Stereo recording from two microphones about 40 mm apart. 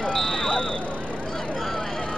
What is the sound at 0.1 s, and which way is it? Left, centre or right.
Vehicle, centre.